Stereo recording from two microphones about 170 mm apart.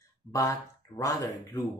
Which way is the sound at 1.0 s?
20° left (ahead or behind).